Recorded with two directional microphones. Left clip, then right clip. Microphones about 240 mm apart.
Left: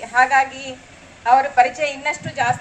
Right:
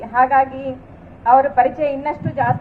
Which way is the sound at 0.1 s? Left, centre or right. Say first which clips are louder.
Right 1 dB; left.